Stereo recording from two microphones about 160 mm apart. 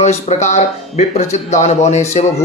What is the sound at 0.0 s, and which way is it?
Speech, 45° left (ahead or behind).